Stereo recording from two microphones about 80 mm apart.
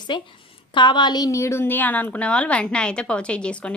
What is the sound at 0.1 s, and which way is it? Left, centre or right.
Speech, left.